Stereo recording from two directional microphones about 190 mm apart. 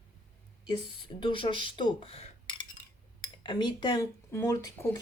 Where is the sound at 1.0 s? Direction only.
25° left (ahead or behind).